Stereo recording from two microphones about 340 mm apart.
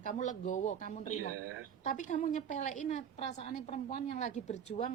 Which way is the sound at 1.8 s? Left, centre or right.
Left.